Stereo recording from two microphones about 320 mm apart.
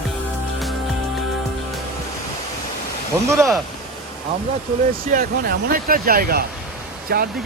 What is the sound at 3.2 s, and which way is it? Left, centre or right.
Speech, centre.